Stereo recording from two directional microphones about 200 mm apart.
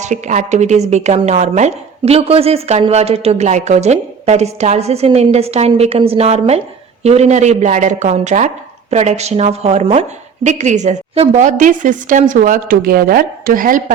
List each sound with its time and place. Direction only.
0.0 s a woman's voice: 35° right (ahead or behind)